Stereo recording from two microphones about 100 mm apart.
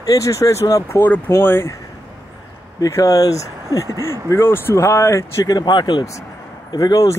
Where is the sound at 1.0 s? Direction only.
20° left (ahead or behind).